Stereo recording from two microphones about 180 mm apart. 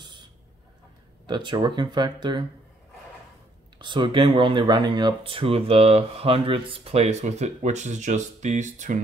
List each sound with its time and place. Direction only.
1.2 s speech: 25° right (ahead or behind)
3.7 s speech: 25° right (ahead or behind); by 9.0 s 45° right (ahead or behind)